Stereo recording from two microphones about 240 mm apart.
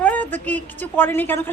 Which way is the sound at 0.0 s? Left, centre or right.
Centre.